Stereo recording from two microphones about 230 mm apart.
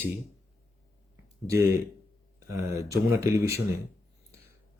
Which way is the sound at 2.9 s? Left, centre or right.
Centre.